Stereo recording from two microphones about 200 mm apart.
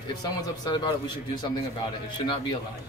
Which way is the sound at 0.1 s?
20° left (ahead or behind).